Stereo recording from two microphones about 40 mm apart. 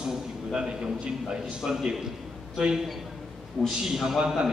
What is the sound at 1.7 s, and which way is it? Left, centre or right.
Speech, centre.